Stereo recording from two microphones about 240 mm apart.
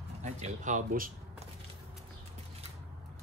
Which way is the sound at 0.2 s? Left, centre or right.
Right.